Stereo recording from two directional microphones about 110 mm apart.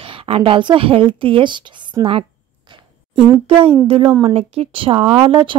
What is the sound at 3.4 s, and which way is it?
A woman's voice, 55° right (ahead or behind).